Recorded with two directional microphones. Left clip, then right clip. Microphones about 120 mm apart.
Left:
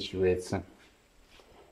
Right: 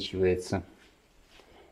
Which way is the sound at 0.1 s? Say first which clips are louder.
Right 1 dB; 60° right (ahead or behind).